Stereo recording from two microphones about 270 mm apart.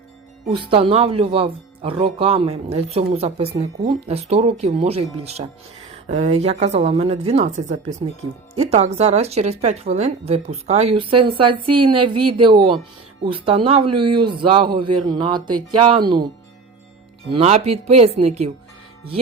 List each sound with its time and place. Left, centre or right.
0.5 s speech: centre
13.9 s speech: right
14.2 s speech: centre
17.3 s speech: right